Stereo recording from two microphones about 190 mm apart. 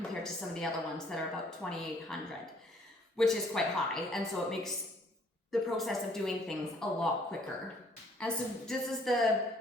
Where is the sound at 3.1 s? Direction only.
Centre (ahead or behind).